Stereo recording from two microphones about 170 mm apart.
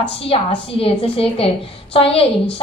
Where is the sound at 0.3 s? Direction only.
35° left (ahead or behind).